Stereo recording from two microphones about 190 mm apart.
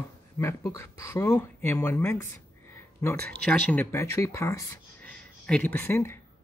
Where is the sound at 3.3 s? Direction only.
5° left (ahead or behind).